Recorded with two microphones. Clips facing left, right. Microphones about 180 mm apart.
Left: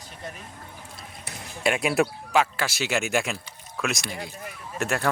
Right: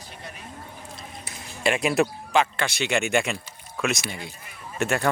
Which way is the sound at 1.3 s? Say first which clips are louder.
Left 1 dB; 65° left (ahead or behind).